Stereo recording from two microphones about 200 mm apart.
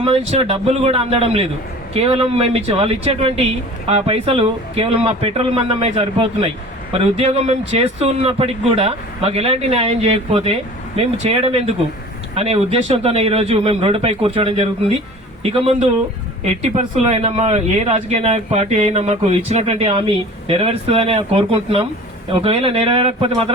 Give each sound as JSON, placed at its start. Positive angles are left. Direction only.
{"t": 0.0, "sound": "speech", "side_deg": -30}